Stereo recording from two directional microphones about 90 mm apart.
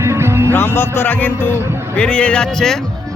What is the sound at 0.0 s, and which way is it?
Music, 30° right (ahead or behind).